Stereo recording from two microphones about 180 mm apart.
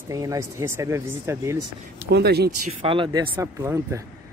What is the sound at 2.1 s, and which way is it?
Speech, 65° right (ahead or behind).